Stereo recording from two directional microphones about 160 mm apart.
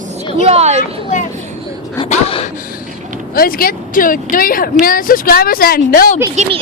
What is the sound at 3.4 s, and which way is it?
Speech, 65° left (ahead or behind).